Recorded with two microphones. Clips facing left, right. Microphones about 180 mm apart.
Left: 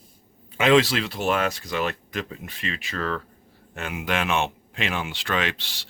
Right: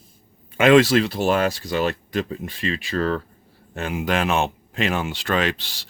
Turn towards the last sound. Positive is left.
turn(degrees=-40)  # may be behind; listen again after turning